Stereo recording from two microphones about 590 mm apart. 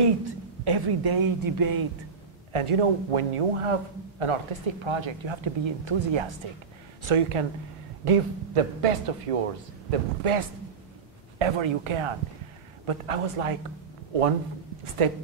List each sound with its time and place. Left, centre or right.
0.0 s a woman's voice: right
2.5 s a woman's voice: right